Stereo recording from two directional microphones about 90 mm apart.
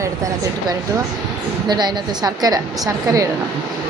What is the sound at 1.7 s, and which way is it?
A woman's voice, 55° right (ahead or behind).